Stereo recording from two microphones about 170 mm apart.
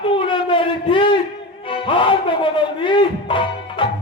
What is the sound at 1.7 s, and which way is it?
Music, 30° left (ahead or behind).